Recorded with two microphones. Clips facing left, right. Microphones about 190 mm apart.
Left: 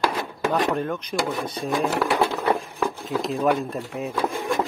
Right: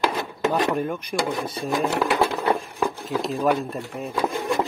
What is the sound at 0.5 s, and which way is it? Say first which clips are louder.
Speech: even; 10° right (ahead or behind).